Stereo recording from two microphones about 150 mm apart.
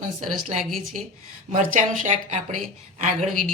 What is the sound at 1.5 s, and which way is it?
Speech, 55° right (ahead or behind).